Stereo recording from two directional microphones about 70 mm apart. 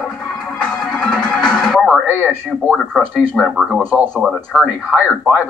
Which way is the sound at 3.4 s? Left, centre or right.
Centre.